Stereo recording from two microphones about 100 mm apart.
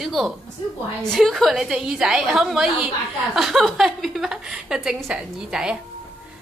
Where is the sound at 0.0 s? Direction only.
Centre (ahead or behind).